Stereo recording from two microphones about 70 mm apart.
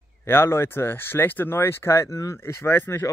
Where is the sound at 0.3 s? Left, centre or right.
Left.